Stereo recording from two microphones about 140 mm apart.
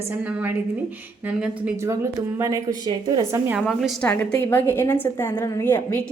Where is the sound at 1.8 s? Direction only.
20° right (ahead or behind).